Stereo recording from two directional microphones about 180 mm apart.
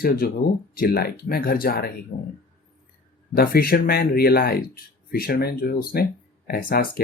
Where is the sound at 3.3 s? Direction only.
55° left (ahead or behind).